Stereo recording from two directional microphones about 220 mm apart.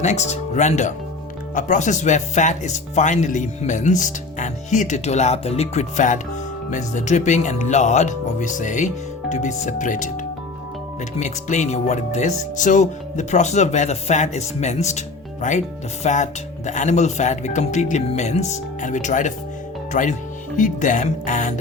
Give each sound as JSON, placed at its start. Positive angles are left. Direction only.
{"t": 0.0, "sound": "speech", "side_deg": 30}